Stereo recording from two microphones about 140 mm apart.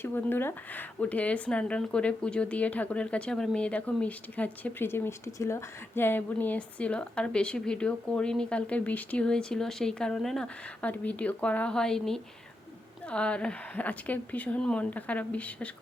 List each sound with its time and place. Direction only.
0.0 s speech: 15° left (ahead or behind)